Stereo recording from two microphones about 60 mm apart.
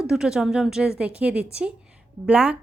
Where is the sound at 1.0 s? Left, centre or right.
Centre.